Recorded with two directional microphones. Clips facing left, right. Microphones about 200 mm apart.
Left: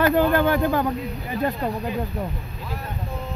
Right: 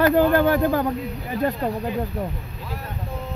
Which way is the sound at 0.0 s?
40° right (ahead or behind).